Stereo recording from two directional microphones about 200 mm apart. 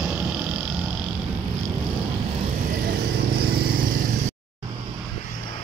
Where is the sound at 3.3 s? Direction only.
50° right (ahead or behind).